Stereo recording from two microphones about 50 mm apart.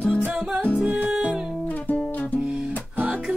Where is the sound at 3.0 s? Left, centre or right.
Right.